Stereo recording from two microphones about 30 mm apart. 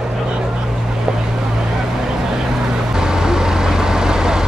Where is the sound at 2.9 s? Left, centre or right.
Right.